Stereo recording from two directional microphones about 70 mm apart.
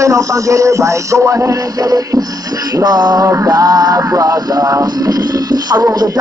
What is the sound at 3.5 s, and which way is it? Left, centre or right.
Speech, right.